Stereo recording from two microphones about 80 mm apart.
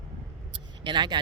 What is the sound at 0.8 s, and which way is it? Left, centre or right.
Speech, right.